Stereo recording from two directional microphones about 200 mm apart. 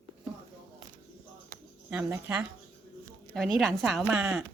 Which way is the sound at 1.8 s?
5° right (ahead or behind).